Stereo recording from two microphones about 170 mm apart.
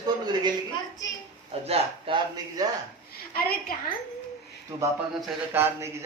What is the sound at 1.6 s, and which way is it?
Speech, 35° right (ahead or behind).